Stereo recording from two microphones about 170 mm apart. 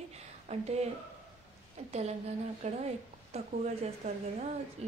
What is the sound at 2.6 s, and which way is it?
Speech, 40° right (ahead or behind).